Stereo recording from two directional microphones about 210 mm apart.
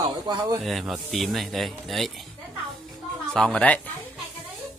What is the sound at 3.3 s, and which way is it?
Speech, 5° left (ahead or behind).